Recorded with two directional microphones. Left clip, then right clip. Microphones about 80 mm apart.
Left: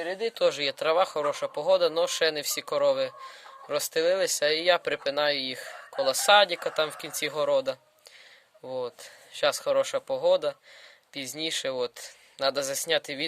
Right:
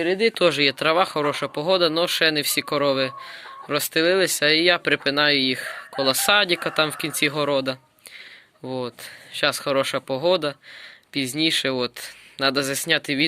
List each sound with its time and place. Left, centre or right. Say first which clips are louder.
0.0 s speech: right 10 dB; right
0.3 s speech: right 5 dB; centre
0.6 s speech: right 6 dB; centre